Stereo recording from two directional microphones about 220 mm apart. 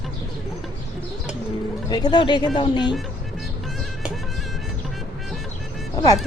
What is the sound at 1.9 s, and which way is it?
Speech, 20° left (ahead or behind).